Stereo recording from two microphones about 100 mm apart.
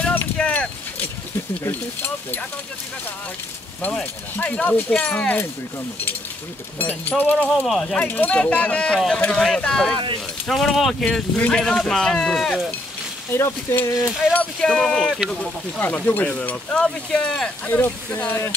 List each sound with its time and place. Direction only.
0.0 s a sound: 20° left (ahead or behind)
1.6 s speech: 20° left (ahead or behind)
3.8 s speech: 15° left (ahead or behind)
6.8 s speech: 15° left (ahead or behind)
7.4 s speech: centre (ahead or behind)
7.8 s speech: 10° left (ahead or behind)
13.3 s speech: 25° left (ahead or behind)
14.3 s speech: 10° left (ahead or behind)
15.8 s speech: 20° left (ahead or behind)
17.6 s speech: 20° left (ahead or behind)